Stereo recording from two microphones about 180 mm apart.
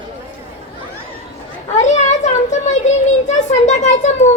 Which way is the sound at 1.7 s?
40° left (ahead or behind).